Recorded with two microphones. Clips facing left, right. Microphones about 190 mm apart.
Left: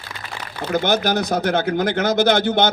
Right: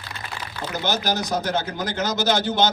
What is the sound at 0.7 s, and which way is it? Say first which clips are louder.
Speech: left 6 dB; 55° left (ahead or behind).